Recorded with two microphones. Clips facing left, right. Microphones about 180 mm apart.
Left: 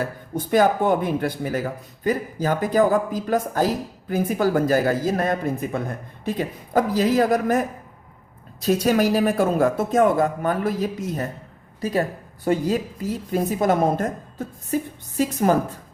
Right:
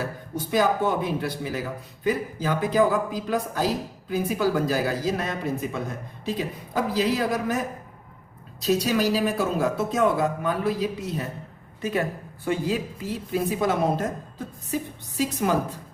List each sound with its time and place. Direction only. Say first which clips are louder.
0.3 s speech: left 4 dB; 55° left (ahead or behind)
8.6 s speech: left 3 dB; 50° left (ahead or behind)
11.8 s a woman's voice: left 3 dB; 35° left (ahead or behind)